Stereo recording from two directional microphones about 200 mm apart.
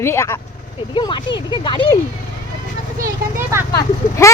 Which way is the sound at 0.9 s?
25° left (ahead or behind).